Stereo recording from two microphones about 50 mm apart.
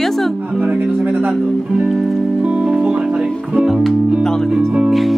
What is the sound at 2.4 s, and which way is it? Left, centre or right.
Music, right.